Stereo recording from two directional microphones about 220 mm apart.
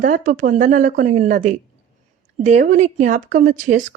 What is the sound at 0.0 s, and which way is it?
Speech, 35° right (ahead or behind).